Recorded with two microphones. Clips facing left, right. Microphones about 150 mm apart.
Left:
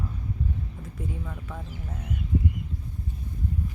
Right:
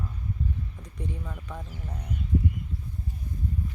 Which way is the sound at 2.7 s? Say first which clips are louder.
Left 1 dB; 40° left (ahead or behind).